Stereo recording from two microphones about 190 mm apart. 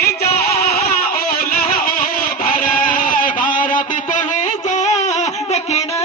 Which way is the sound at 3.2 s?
45° left (ahead or behind).